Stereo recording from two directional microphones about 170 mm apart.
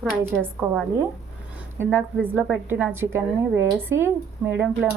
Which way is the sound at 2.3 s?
5° right (ahead or behind).